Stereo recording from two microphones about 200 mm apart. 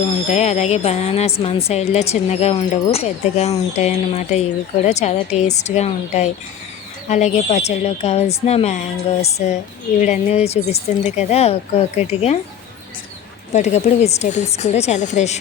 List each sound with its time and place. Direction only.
0.3 s a woman's voice: 35° left (ahead or behind)
13.5 s a woman's voice: 35° left (ahead or behind)